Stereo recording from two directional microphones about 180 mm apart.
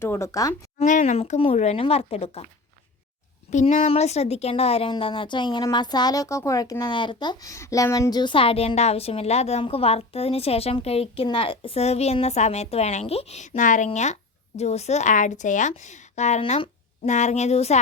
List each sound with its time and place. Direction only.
0.0 s speech: 15° left (ahead or behind)
0.8 s speech: 40° left (ahead or behind)
3.5 s speech: 40° left (ahead or behind)